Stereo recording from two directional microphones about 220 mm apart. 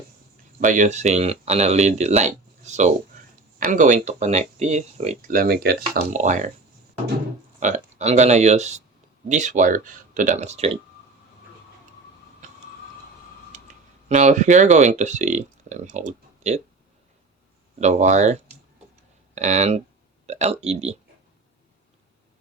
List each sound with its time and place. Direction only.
0.6 s speech: 35° right (ahead or behind)
7.6 s speech: 30° right (ahead or behind)
13.5 s a sound: 35° right (ahead or behind)
14.1 s speech: 35° right (ahead or behind)
17.7 s speech: 30° right (ahead or behind)